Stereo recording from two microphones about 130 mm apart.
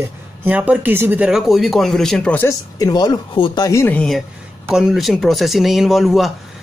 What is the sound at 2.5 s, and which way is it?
Speech, 30° left (ahead or behind).